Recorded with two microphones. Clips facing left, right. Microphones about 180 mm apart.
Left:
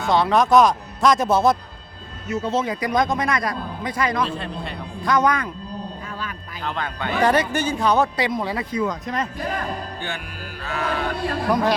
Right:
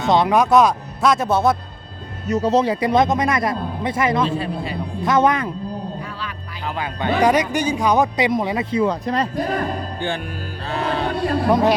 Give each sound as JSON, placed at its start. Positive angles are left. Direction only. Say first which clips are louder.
{"t": 0.1, "sound": "speech", "louder": "right 1 dB", "side_deg": -15}
{"t": 2.3, "sound": "speech", "louder": "right 6 dB", "side_deg": -40}
{"t": 4.3, "sound": "speech", "louder": "right 5 dB", "side_deg": -5}
{"t": 5.0, "sound": "speech", "louder": "right 3 dB", "side_deg": -25}
{"t": 6.7, "sound": "speech", "louder": "right 4 dB", "side_deg": -10}
{"t": 10.6, "sound": "speech", "louder": "right 3 dB", "side_deg": -30}